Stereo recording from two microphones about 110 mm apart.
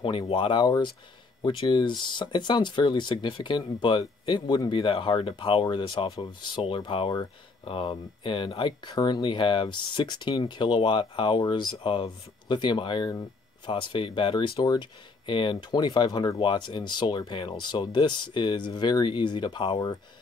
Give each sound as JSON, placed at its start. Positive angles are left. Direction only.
{"t": 0.0, "sound": "speech", "side_deg": 50}